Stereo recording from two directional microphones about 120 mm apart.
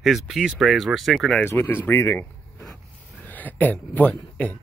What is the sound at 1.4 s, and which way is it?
Speech, 20° left (ahead or behind).